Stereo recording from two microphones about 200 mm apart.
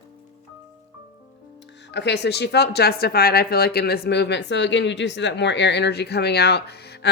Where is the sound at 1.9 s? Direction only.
60° left (ahead or behind).